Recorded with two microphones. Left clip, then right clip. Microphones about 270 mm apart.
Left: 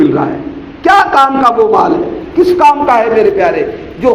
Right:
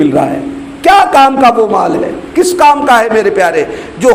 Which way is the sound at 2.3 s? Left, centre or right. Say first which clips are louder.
Even; right.